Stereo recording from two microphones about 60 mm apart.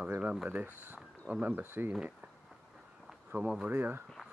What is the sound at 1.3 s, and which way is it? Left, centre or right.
Speech, right.